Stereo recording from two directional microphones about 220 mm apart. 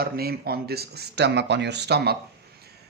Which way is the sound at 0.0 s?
45° right (ahead or behind).